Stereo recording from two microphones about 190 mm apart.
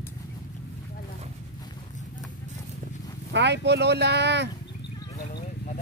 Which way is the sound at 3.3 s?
65° right (ahead or behind).